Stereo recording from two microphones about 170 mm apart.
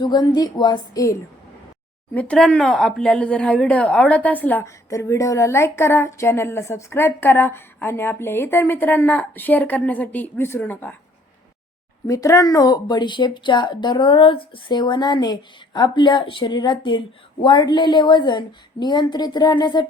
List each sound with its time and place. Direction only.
0.0 s speech: 25° left (ahead or behind)
2.1 s speech: 5° left (ahead or behind)
12.0 s speech: 20° left (ahead or behind)